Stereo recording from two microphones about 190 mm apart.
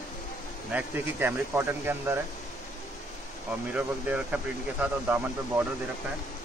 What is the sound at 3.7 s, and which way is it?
Speech, 5° right (ahead or behind).